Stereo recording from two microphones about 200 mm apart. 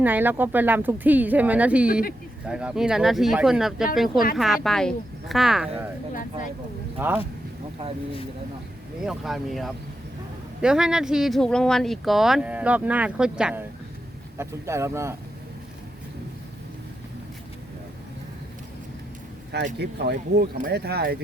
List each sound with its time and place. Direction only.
0.0 s speech: 10° right (ahead or behind)
7.0 s speech: 10° right (ahead or behind)
9.0 s speech: centre (ahead or behind)
19.8 s speech: 55° right (ahead or behind)